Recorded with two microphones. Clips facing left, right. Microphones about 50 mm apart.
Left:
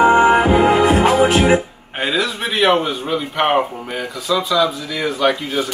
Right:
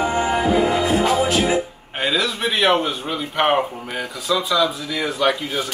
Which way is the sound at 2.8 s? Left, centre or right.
Centre.